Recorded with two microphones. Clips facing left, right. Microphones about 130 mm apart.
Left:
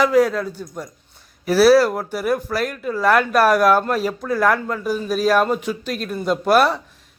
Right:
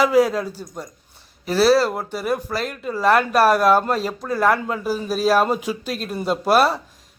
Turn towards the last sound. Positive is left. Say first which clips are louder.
# left 1 dB
turn(degrees=-5)  # may be behind; listen again after turning